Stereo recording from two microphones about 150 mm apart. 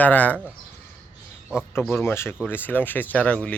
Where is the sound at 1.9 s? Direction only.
15° left (ahead or behind).